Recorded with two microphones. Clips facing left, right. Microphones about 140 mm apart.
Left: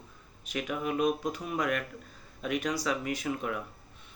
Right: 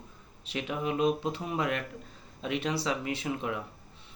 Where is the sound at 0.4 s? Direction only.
25° right (ahead or behind).